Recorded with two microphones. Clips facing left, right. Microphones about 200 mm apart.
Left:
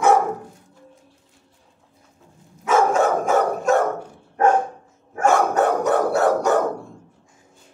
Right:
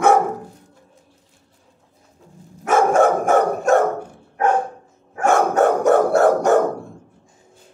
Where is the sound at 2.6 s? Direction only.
55° right (ahead or behind).